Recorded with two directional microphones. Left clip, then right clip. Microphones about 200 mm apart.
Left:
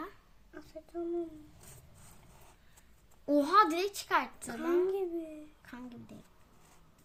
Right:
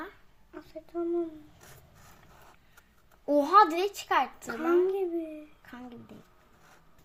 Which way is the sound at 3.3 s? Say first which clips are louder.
Right 5 dB; 35° left (ahead or behind).